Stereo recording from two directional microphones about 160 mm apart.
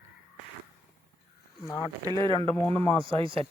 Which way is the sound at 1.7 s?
20° left (ahead or behind).